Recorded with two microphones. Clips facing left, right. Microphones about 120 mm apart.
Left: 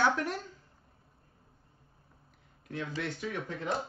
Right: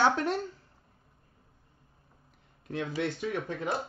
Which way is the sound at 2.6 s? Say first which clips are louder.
Right 4 dB; 30° right (ahead or behind).